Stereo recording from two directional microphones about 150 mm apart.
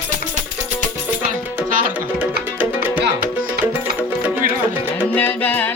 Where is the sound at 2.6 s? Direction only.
10° right (ahead or behind).